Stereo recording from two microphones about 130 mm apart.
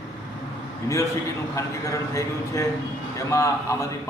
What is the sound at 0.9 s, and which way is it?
A man's voice, 25° left (ahead or behind).